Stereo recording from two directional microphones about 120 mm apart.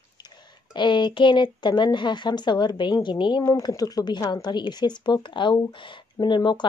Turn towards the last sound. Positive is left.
turn(degrees=40)  # may be behind; listen again after turning